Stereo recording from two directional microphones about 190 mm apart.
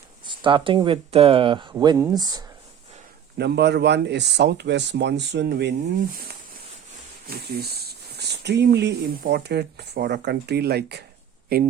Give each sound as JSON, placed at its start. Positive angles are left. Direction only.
{"t": 0.3, "sound": "speech", "side_deg": -25}
{"t": 3.3, "sound": "speech", "side_deg": -60}
{"t": 7.3, "sound": "speech", "side_deg": -55}